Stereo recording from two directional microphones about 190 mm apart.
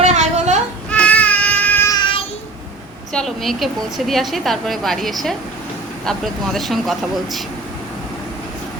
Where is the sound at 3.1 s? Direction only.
Centre (ahead or behind).